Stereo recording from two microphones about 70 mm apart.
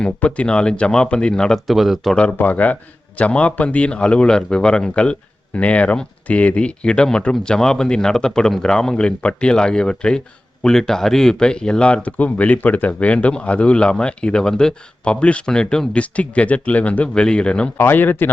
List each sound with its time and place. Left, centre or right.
0.0 s speech: centre
2.3 s speech: left
17.7 s speech: left